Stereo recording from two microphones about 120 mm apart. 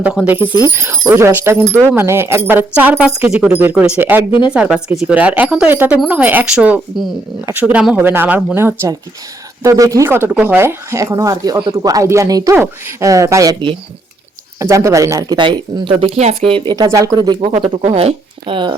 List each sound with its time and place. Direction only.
0.0 s speech: 10° right (ahead or behind)
0.3 s speech: 20° right (ahead or behind)
15.4 s speech: 40° right (ahead or behind)
16.1 s speech: 60° right (ahead or behind)
16.7 s speech: 30° right (ahead or behind)
17.8 s speech: 55° right (ahead or behind)